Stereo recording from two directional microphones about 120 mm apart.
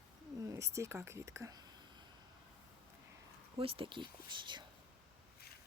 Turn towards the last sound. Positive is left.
turn(degrees=-40)  # may be behind; listen again after turning